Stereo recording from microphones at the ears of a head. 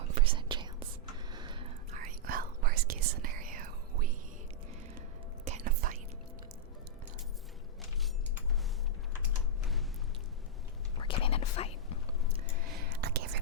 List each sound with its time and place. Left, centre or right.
0.0 s whispering: right
5.5 s whispering: right
10.9 s whispering: left
12.6 s whispering: right